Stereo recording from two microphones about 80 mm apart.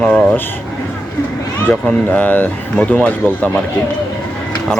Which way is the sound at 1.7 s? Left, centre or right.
Centre.